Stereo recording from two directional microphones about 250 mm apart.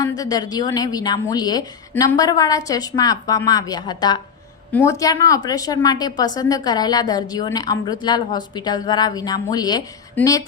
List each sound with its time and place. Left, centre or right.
0.2 s a woman's voice: centre